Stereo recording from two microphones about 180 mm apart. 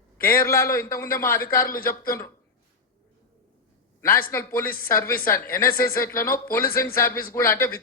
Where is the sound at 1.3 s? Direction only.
55° left (ahead or behind).